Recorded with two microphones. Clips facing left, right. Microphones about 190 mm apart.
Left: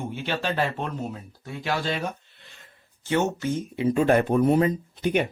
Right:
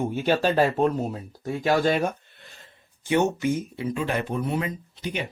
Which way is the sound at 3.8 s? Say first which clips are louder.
Left 8 dB; 45° left (ahead or behind).